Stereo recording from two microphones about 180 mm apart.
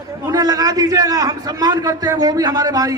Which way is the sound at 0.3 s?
20° right (ahead or behind).